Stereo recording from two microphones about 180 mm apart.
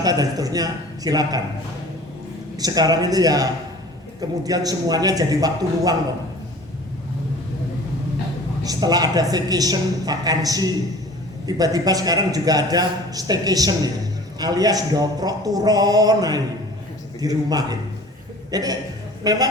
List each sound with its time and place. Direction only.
0.0 s a man's voice: 20° right (ahead or behind)
2.6 s a man's voice: 20° right (ahead or behind)
8.6 s a man's voice: 20° right (ahead or behind)